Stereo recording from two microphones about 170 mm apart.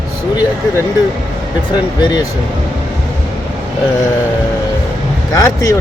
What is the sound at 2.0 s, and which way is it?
Speech, 25° left (ahead or behind).